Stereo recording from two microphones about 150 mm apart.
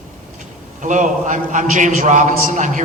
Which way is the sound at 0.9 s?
55° right (ahead or behind).